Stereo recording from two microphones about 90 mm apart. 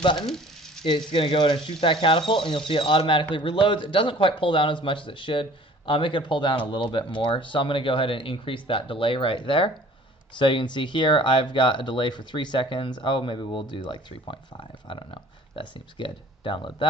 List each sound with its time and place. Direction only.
0.8 s speech: 70° left (ahead or behind)
10.3 s speech: 65° left (ahead or behind)